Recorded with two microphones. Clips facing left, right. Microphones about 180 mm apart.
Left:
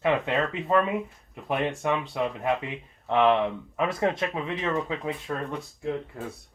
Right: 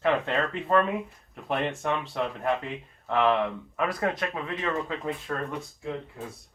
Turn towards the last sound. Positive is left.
turn(degrees=0)  # may be behind; listen again after turning